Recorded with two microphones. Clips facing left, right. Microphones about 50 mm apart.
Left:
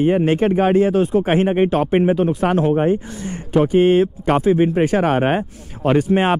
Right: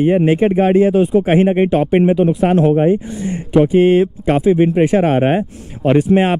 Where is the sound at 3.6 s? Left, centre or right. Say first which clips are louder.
Right 2 dB; centre.